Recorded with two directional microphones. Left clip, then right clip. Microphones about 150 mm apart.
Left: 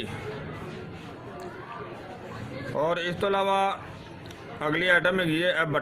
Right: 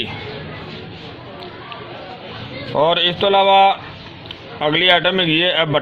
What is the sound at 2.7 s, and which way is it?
A man's voice, 35° right (ahead or behind).